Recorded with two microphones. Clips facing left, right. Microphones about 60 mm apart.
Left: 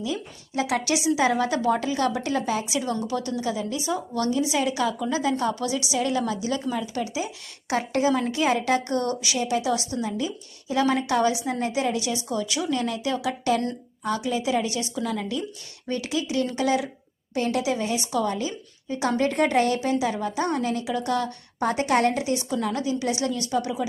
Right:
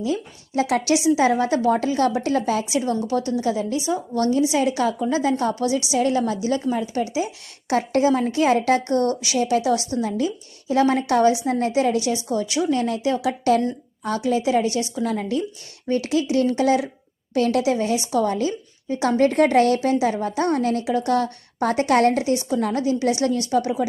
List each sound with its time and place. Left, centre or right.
0.0 s a woman's voice: right
9.7 s a woman's voice: left
10.0 s a woman's voice: right
13.1 s a woman's voice: right
17.3 s a woman's voice: right
17.6 s a woman's voice: right